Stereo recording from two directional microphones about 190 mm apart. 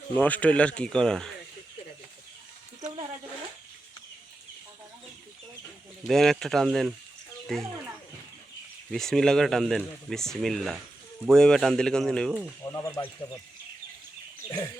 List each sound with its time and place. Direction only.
0.1 s speech: 10° left (ahead or behind)
6.1 s speech: centre (ahead or behind)
8.9 s speech: centre (ahead or behind)
12.6 s speech: 15° left (ahead or behind)